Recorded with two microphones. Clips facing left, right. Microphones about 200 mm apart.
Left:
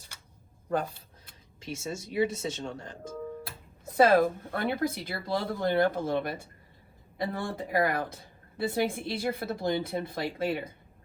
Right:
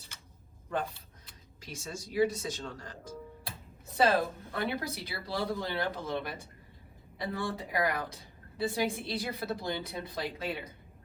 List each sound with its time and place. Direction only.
0.7 s a sound: 45° left (ahead or behind)
1.6 s speech: 25° left (ahead or behind)
3.8 s speech: 50° left (ahead or behind)